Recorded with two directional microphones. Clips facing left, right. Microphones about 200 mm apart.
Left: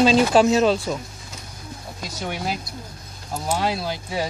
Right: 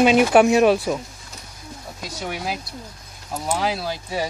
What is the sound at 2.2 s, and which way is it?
Speech, centre (ahead or behind).